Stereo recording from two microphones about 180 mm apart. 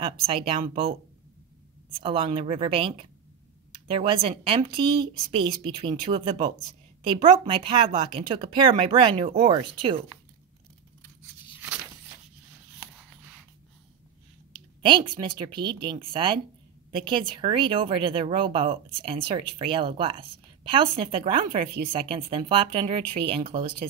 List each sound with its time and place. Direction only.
0.0 s a woman's voice: 30° right (ahead or behind)
2.0 s a woman's voice: 30° right (ahead or behind)
14.8 s a woman's voice: 25° right (ahead or behind)